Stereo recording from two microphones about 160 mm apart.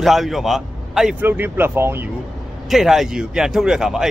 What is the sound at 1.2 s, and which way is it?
Speech, 10° right (ahead or behind).